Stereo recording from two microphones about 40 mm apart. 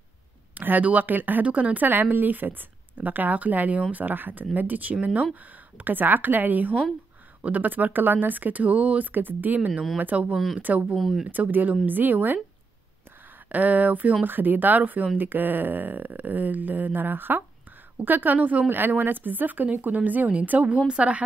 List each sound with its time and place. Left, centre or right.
0.6 s speech: right
1.4 s speech: right
1.9 s speech: right
10.3 s speech: centre
10.6 s speech: right
11.0 s speech: centre
11.2 s speech: right
13.5 s speech: right
14.2 s speech: right